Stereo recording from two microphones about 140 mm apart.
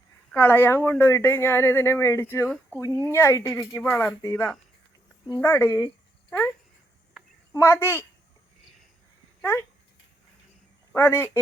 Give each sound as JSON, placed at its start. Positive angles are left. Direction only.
{"t": 0.3, "sound": "speech", "side_deg": 15}
{"t": 7.5, "sound": "speech", "side_deg": 20}
{"t": 9.4, "sound": "speech", "side_deg": 15}
{"t": 10.9, "sound": "speech", "side_deg": 15}